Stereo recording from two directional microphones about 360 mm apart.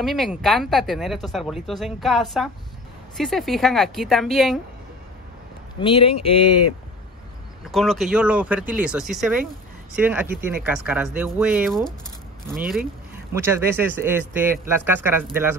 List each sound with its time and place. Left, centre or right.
0.0 s speech: centre
5.8 s speech: centre
7.6 s speech: centre